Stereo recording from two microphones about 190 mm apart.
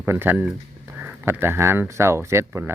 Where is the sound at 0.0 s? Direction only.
10° right (ahead or behind).